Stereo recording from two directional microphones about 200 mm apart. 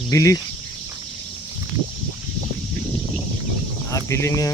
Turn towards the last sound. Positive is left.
turn(degrees=15)  # may be behind; listen again after turning